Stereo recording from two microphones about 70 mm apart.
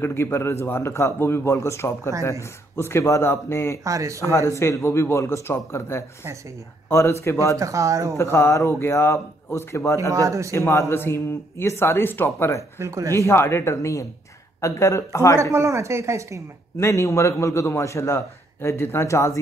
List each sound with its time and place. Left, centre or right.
0.0 s a man's voice: left
3.8 s speech: right
4.2 s a man's voice: left
7.5 s speech: right
8.2 s a man's voice: left
10.1 s speech: right
10.5 s a man's voice: left
12.7 s speech: right
13.1 s a man's voice: left
15.5 s speech: right
16.7 s a man's voice: left